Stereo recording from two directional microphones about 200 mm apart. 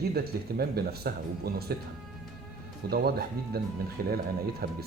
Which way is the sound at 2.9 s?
50° right (ahead or behind).